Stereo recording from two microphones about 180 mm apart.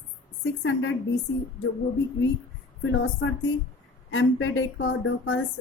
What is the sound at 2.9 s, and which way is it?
A woman's voice, 90° left.